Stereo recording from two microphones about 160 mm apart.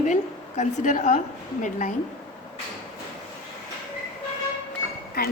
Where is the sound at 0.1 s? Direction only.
50° left (ahead or behind).